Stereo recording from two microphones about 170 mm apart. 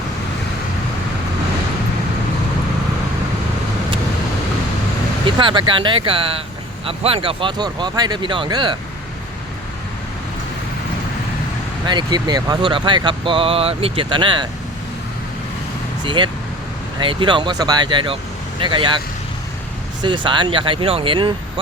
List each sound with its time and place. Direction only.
5.2 s speech: 30° right (ahead or behind)
11.9 s speech: 25° right (ahead or behind)
16.0 s speech: 25° right (ahead or behind)
20.0 s speech: 30° right (ahead or behind)